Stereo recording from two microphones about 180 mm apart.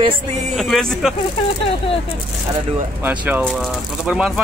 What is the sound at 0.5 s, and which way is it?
Speech, centre (ahead or behind).